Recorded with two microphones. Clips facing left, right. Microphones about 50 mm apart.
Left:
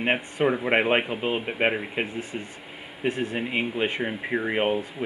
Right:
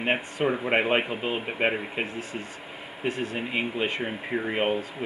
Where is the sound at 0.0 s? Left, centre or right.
Centre.